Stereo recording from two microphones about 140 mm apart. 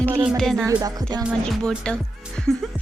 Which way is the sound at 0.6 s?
25° right (ahead or behind).